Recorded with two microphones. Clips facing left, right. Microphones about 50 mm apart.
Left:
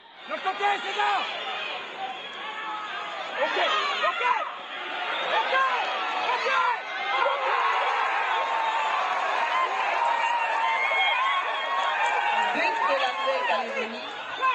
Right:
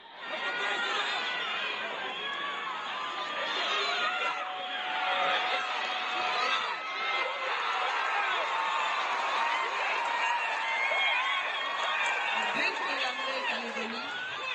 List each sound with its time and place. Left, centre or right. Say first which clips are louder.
0.5 s speech: left 6 dB; left
3.3 s speech: left 9 dB; left
5.3 s a sound: left 7 dB; left